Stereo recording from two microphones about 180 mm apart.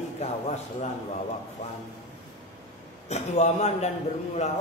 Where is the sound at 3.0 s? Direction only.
40° left (ahead or behind).